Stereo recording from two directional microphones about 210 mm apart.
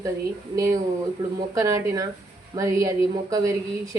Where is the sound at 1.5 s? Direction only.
15° right (ahead or behind).